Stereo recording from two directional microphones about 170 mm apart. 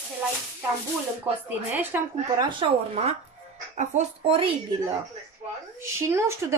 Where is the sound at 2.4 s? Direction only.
30° right (ahead or behind).